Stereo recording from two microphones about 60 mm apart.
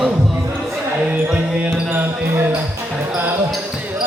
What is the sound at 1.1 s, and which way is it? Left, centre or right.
Music, centre.